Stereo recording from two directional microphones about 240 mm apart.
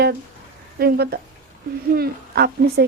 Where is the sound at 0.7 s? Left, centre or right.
Right.